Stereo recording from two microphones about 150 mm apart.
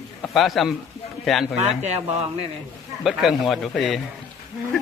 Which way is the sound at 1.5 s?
45° right (ahead or behind).